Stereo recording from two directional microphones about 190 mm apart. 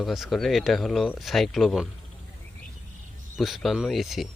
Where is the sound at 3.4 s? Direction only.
Centre (ahead or behind).